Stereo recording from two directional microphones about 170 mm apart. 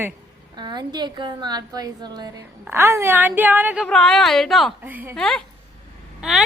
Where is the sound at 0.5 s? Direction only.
25° right (ahead or behind); by 4.7 s centre (ahead or behind).